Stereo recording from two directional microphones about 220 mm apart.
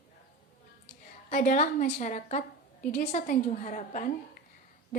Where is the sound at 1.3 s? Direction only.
35° left (ahead or behind).